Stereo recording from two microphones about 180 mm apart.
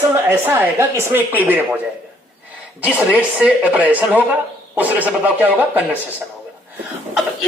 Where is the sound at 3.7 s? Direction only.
10° right (ahead or behind).